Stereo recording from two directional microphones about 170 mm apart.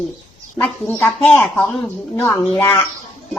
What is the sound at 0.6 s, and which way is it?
Speech, 10° left (ahead or behind).